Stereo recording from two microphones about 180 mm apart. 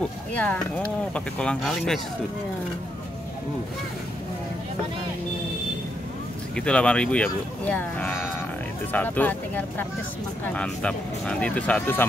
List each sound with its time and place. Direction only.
0.3 s speech: 10° left (ahead or behind)
6.5 s speech: 5° left (ahead or behind)